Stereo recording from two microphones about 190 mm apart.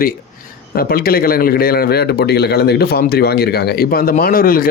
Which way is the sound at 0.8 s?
50° left (ahead or behind).